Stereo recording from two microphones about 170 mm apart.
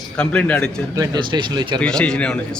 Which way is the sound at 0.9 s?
25° right (ahead or behind).